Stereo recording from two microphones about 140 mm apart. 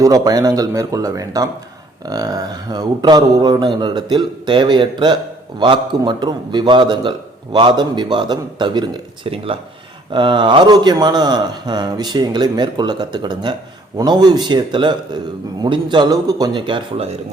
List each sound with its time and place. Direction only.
0.0 s a man's voice: 25° right (ahead or behind); by 17.2 s 40° right (ahead or behind)